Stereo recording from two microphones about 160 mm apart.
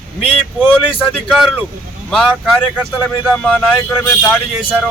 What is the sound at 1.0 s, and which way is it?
Speech, 5° right (ahead or behind).